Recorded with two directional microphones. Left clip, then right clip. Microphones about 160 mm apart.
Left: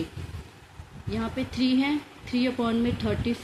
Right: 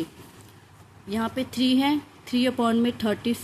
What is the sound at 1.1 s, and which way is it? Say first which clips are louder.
Speech: right 3 dB; 60° right (ahead or behind).